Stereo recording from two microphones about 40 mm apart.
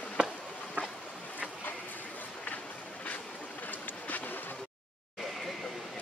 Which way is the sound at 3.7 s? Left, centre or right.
Left.